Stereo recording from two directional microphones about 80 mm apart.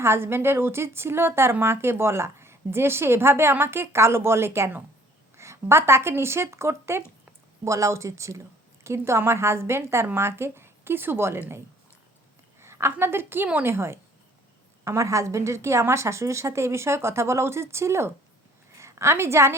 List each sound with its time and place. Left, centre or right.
0.0 s a woman's voice: right